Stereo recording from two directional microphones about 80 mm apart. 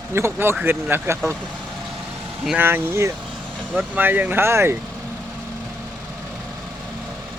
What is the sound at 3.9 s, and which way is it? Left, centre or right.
Speech, right.